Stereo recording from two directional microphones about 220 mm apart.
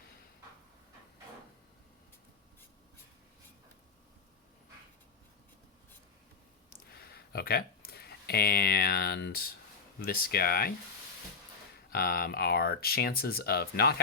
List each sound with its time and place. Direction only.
6.9 s speech: 45° left (ahead or behind)
11.9 s speech: 45° left (ahead or behind)